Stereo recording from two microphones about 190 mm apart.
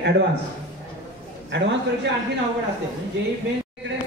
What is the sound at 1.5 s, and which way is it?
Speech, 65° right (ahead or behind).